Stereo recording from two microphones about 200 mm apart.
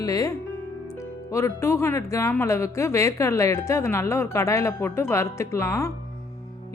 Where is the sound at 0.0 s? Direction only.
15° left (ahead or behind).